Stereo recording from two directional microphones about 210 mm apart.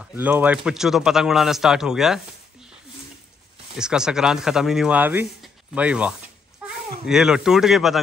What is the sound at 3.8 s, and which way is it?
Speech, 5° right (ahead or behind).